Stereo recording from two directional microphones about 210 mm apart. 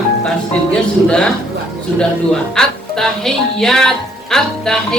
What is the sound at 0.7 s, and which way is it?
Speech, 5° left (ahead or behind).